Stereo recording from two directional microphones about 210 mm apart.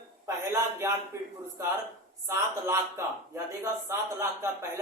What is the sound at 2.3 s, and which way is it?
Speech, 15° right (ahead or behind).